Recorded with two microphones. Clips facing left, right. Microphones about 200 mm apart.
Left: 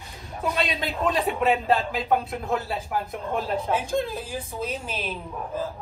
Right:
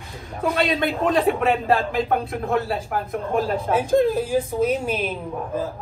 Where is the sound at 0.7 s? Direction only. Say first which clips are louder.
Right 5 dB; 50° right (ahead or behind).